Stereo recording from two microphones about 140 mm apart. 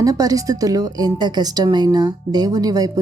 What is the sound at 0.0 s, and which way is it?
A woman's voice, 25° right (ahead or behind).